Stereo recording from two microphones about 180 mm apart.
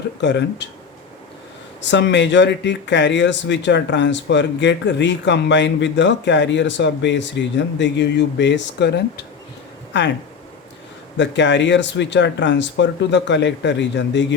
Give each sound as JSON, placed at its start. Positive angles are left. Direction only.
{"t": 0.2, "sound": "speech", "side_deg": 75}
{"t": 1.8, "sound": "speech", "side_deg": 80}
{"t": 11.2, "sound": "speech", "side_deg": 80}